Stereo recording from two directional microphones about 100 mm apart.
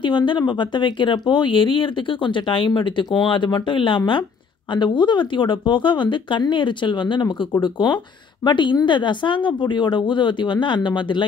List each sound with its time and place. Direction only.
0.0 s speech: 55° left (ahead or behind)